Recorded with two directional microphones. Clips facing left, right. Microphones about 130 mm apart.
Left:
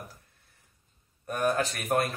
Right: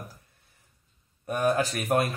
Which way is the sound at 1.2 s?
5° right (ahead or behind).